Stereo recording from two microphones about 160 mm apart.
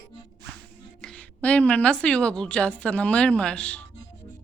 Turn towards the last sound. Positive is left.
turn(degrees=5)  # may be behind; listen again after turning